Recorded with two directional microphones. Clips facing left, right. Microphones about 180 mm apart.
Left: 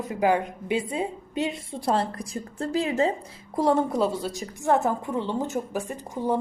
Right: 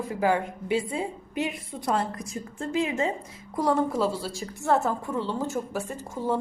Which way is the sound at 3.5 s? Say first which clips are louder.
Left 2 dB; 25° left (ahead or behind).